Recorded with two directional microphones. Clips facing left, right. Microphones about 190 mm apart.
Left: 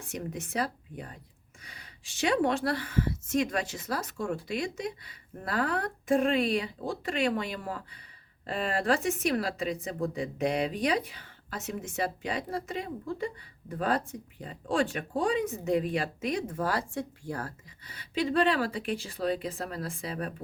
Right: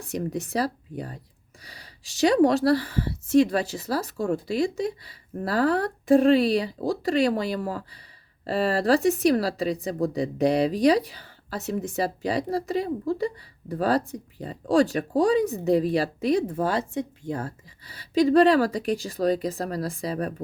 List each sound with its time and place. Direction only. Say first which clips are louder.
0.0 s speech: right 7 dB; 35° right (ahead or behind)